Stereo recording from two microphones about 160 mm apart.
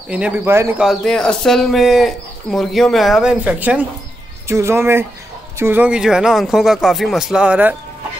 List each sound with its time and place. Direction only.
0.1 s speech: 10° right (ahead or behind)
0.7 s speech: centre (ahead or behind)